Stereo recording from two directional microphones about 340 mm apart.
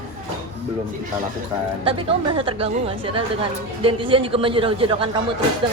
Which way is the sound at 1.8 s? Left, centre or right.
Centre.